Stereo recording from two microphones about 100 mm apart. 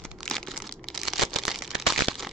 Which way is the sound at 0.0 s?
5° left (ahead or behind).